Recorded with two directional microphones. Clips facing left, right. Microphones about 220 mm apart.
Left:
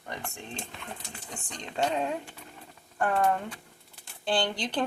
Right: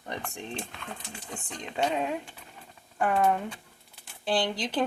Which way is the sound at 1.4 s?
5° right (ahead or behind).